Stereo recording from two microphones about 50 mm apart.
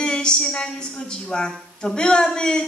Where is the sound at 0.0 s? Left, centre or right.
Centre.